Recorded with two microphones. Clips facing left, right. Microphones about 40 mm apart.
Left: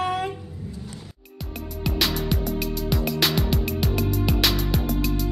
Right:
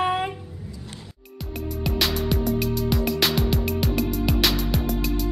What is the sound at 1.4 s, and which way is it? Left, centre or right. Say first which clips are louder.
Music: right 2 dB; centre.